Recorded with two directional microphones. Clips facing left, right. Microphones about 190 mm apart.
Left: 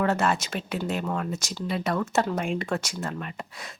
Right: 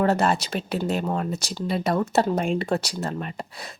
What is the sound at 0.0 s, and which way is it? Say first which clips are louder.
A woman's voice: right 3 dB; 35° right (ahead or behind).